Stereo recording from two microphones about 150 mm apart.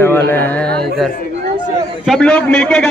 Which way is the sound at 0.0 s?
15° left (ahead or behind).